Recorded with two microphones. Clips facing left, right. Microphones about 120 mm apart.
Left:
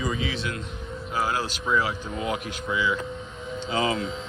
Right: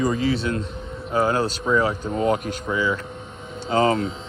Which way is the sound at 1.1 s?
30° right (ahead or behind).